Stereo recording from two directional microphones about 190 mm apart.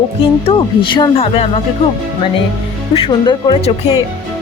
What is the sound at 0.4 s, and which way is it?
Speech, 25° left (ahead or behind).